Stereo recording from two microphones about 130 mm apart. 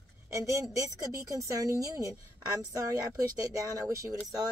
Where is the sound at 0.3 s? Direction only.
25° right (ahead or behind).